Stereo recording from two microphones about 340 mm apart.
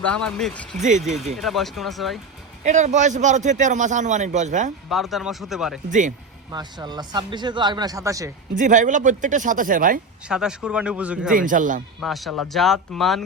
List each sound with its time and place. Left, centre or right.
0.0 s speech: centre
0.8 s a man's voice: right
1.4 s speech: centre
2.6 s a man's voice: right
4.9 s speech: centre
5.9 s a man's voice: right
8.5 s a man's voice: right
10.2 s speech: centre
11.3 s a man's voice: right
11.9 s speech: centre